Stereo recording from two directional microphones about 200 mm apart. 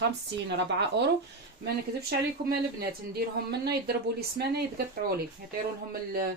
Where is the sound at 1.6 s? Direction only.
55° right (ahead or behind).